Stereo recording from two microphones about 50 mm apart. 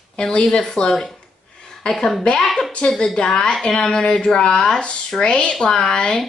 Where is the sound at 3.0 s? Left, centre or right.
Centre.